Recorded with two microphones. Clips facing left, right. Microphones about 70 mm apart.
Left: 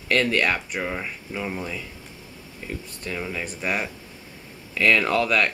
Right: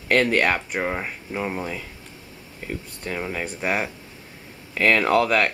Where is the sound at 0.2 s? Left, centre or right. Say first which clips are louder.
Right 2 dB; right.